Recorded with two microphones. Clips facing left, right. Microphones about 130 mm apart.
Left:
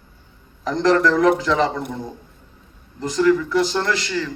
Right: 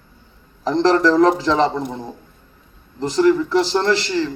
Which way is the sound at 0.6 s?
30° right (ahead or behind).